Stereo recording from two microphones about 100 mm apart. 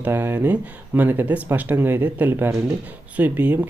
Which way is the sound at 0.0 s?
20° right (ahead or behind).